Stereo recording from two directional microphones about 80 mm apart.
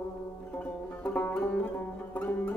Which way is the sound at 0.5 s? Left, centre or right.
Centre.